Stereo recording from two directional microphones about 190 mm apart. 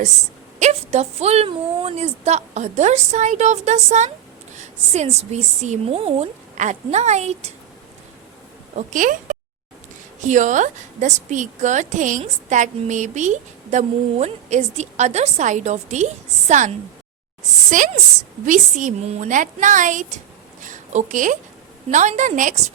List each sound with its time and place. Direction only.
0.6 s a woman's voice: 35° right (ahead or behind)
8.7 s a woman's voice: 45° right (ahead or behind)
20.6 s a sound: 40° right (ahead or behind)
21.8 s a woman's voice: 40° right (ahead or behind)